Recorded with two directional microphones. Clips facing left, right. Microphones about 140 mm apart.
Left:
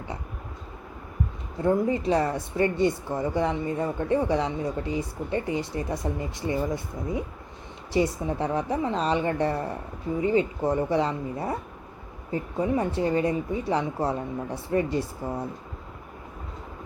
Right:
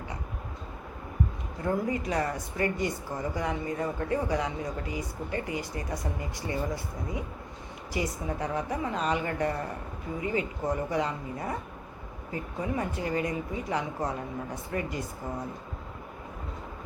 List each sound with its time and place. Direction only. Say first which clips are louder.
1.6 s speech: left 6 dB; 25° left (ahead or behind)